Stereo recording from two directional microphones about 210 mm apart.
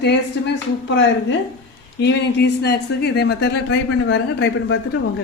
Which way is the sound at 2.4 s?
50° left (ahead or behind).